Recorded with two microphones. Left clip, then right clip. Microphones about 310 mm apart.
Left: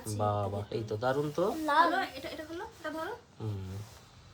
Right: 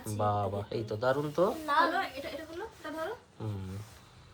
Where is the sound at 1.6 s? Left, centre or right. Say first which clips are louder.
Left 4 dB; left.